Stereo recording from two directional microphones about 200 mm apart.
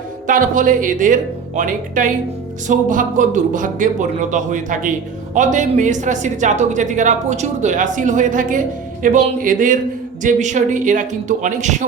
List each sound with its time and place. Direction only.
0.3 s a woman's voice: 40° right (ahead or behind)